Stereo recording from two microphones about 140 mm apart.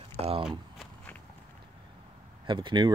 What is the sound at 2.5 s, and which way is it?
Speech, 35° right (ahead or behind).